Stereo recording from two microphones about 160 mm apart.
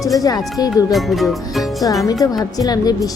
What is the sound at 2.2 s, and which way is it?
Speech, 25° left (ahead or behind).